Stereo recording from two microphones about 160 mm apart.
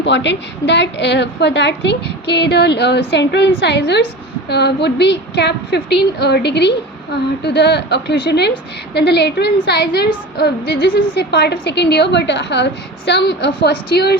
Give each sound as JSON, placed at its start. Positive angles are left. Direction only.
{"t": 0.0, "sound": "a woman's voice", "side_deg": 90}